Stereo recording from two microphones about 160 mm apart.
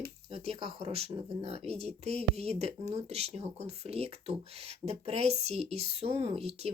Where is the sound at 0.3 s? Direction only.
40° right (ahead or behind).